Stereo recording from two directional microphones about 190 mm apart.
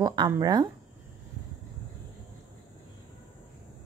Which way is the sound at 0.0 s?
20° right (ahead or behind).